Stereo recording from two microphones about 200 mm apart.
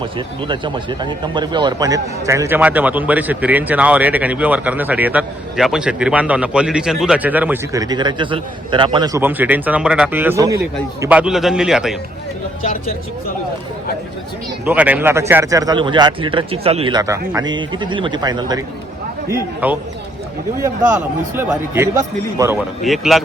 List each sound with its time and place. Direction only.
0.0 s a man's voice: 25° right (ahead or behind); by 11.9 s centre (ahead or behind)
14.6 s a man's voice: 10° right (ahead or behind)
19.6 s speech: 10° right (ahead or behind)
21.3 s speech: 15° right (ahead or behind)
22.5 s a man's voice: centre (ahead or behind)